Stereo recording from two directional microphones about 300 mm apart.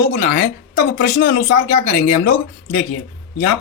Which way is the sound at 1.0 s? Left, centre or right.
Left.